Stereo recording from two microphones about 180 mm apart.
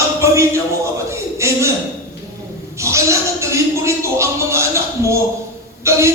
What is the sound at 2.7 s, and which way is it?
Speech, 15° right (ahead or behind).